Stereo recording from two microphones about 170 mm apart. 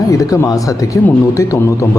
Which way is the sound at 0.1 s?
20° left (ahead or behind).